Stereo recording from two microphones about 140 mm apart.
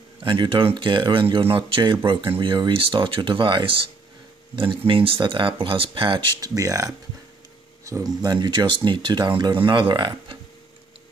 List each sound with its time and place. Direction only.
0.2 s speech: 35° right (ahead or behind)